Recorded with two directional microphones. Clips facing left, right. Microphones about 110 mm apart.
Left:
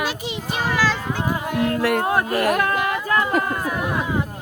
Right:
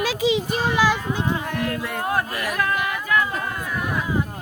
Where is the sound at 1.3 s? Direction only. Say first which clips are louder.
Left 3 dB; 25° left (ahead or behind).